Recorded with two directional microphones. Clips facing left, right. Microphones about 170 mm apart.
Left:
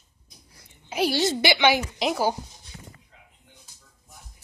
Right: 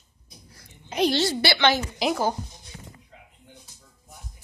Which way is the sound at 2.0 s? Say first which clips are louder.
Right 2 dB; 5° left (ahead or behind).